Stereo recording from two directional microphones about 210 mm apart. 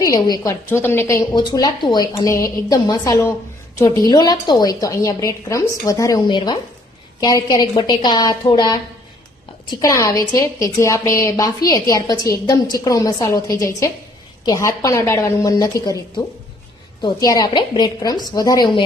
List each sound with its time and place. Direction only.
0.0 s a woman's voice: 15° left (ahead or behind)